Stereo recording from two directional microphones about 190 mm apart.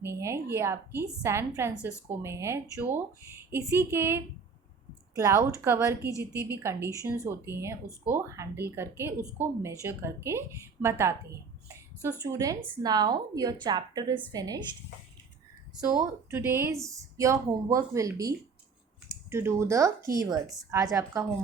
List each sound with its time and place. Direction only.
0.0 s a woman's voice: 15° right (ahead or behind)
16.0 s speech: 10° right (ahead or behind)